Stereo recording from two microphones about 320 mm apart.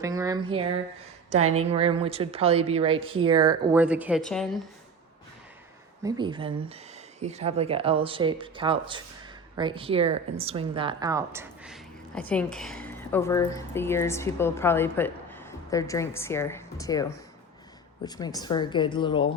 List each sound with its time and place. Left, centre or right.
0.0 s speech: centre
1.7 s speech: centre
6.0 s speech: centre